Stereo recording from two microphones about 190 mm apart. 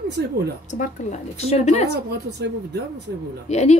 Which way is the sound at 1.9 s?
65° right (ahead or behind).